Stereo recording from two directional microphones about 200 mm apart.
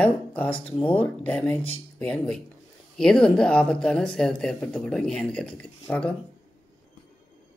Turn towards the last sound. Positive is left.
turn(degrees=5)  # may be behind; listen again after turning